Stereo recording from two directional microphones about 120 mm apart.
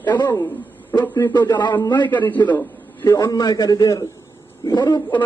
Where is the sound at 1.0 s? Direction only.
20° left (ahead or behind).